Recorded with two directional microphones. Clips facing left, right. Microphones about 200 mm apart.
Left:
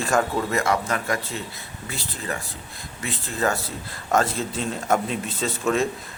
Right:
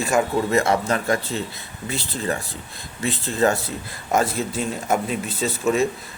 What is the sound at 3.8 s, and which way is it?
A man's voice, 10° right (ahead or behind).